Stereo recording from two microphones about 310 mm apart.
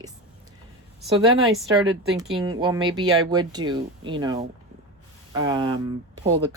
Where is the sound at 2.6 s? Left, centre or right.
Centre.